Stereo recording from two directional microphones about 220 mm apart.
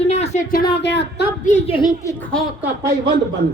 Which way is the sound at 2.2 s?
5° left (ahead or behind).